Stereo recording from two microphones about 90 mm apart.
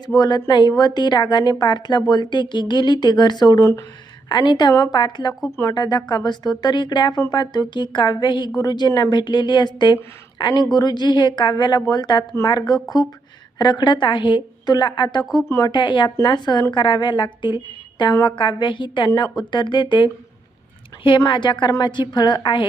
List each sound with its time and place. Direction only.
0.2 s a woman's voice: 50° left (ahead or behind)
3.6 s speech: 30° left (ahead or behind)
4.3 s a woman's voice: 55° left (ahead or behind)
15.2 s speech: centre (ahead or behind)
15.7 s a woman's voice: 60° left (ahead or behind)
21.2 s a woman's voice: 60° left (ahead or behind)